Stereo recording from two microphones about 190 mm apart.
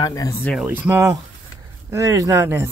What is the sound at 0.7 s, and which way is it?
Speech, 10° right (ahead or behind).